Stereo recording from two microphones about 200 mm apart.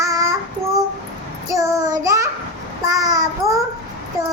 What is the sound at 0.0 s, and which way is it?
Child singing, 15° right (ahead or behind).